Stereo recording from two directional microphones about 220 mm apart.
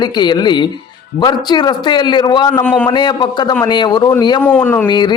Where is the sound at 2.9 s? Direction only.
20° left (ahead or behind).